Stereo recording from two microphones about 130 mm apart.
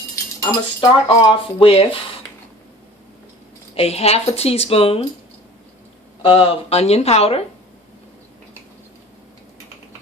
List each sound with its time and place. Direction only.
0.8 s speech: 40° left (ahead or behind)
3.8 s speech: 50° left (ahead or behind)
6.2 s speech: 45° left (ahead or behind)